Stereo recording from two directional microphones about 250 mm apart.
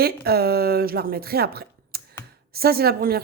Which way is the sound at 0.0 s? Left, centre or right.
Right.